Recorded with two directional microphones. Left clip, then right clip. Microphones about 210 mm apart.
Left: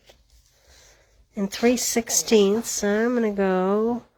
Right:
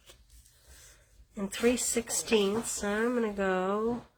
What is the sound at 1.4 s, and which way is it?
Speech, 35° left (ahead or behind).